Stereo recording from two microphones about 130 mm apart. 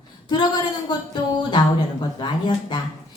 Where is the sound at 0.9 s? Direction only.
35° left (ahead or behind).